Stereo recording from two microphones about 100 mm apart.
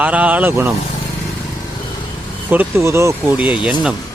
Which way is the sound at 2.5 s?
25° right (ahead or behind).